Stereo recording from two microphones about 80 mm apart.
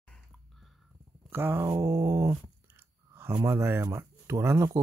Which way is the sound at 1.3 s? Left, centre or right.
Right.